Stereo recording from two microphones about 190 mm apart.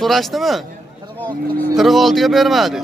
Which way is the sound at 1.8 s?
Centre (ahead or behind).